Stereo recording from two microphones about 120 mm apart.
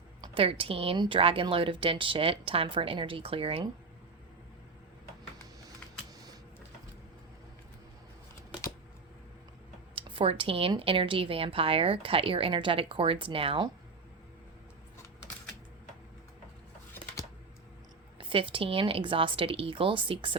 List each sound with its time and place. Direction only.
0.3 s speech: 50° right (ahead or behind)
9.9 s speech: 45° right (ahead or behind)
18.2 s speech: 45° right (ahead or behind)